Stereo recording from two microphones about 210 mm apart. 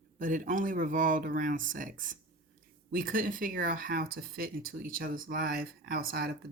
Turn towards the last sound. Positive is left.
turn(degrees=-45)  # may be behind; listen again after turning